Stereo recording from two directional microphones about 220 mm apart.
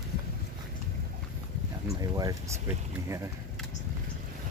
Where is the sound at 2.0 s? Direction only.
15° right (ahead or behind).